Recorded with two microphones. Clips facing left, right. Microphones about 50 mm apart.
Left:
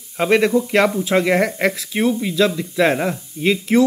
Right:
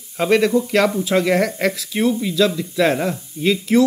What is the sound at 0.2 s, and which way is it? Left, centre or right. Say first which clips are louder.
Speech: even; left.